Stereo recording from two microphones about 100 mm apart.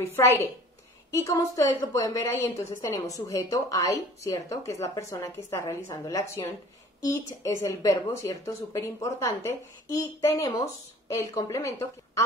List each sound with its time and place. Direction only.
0.1 s a woman's voice: 25° left (ahead or behind)